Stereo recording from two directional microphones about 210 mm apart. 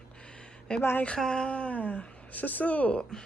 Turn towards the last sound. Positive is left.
turn(degrees=5)  # may be behind; listen again after turning